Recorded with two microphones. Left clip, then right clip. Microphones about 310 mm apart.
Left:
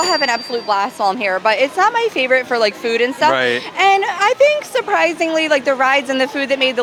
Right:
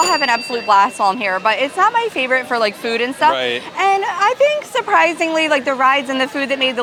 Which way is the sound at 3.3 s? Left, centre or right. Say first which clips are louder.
Left 3 dB; left.